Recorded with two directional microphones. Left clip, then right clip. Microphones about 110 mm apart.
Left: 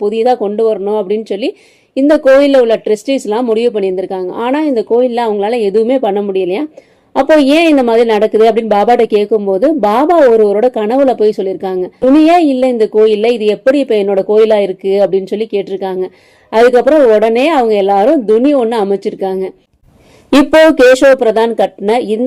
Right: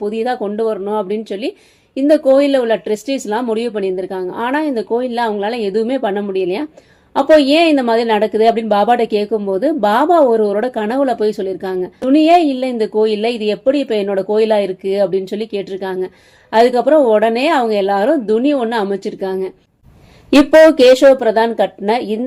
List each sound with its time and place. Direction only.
0.1 s a woman's voice: 20° left (ahead or behind)
21.0 s a woman's voice: 30° left (ahead or behind)